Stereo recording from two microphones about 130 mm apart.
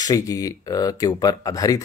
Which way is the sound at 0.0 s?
25° left (ahead or behind).